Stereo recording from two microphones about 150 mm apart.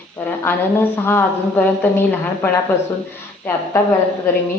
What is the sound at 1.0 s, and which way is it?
A woman's voice, 15° left (ahead or behind).